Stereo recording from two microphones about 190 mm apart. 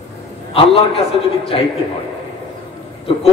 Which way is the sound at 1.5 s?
30° left (ahead or behind).